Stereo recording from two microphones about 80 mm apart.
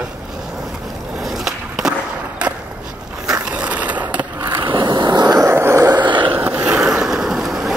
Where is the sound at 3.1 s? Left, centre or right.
Centre.